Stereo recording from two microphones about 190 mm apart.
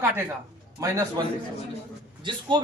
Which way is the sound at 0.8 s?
15° right (ahead or behind).